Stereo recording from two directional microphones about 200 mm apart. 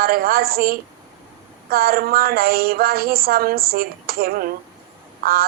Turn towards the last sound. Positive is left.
turn(degrees=-50)  # may be behind; listen again after turning